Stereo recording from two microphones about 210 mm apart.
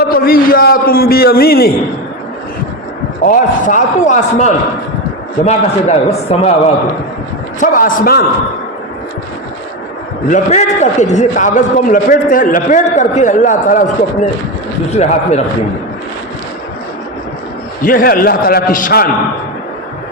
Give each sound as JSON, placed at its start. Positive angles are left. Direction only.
{"t": 0.1, "sound": "a man's voice", "side_deg": 45}
{"t": 3.2, "sound": "a man's voice", "side_deg": 40}
{"t": 7.6, "sound": "a man's voice", "side_deg": 40}
{"t": 10.2, "sound": "a man's voice", "side_deg": 35}
{"t": 17.8, "sound": "a man's voice", "side_deg": 45}